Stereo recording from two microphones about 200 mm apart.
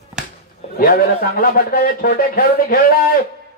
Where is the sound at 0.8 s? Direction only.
45° left (ahead or behind).